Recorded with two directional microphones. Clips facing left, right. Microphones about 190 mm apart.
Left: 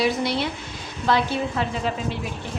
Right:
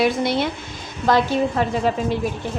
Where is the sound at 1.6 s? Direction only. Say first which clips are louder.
Right 5 dB; 45° right (ahead or behind).